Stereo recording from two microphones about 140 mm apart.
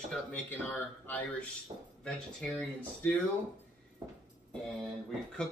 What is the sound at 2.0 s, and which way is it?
Speech, 10° left (ahead or behind).